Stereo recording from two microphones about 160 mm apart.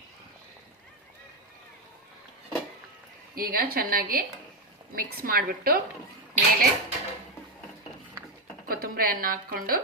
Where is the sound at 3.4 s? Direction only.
70° right (ahead or behind).